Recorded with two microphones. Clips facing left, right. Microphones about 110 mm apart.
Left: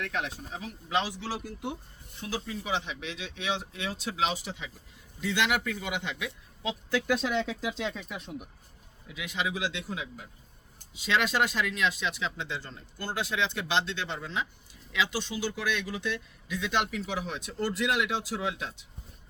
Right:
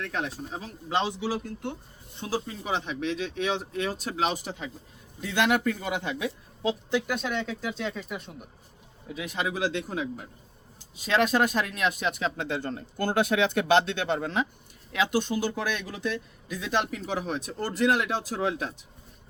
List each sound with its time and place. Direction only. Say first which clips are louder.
0.0 s speech: right 2 dB; 35° right (ahead or behind)
1.3 s speech: right 3 dB; 10° left (ahead or behind)
2.1 s speech: right 4 dB; 35° right (ahead or behind)
7.1 s speech: left 2 dB; centre (ahead or behind)
9.0 s speech: right 2 dB; 40° right (ahead or behind)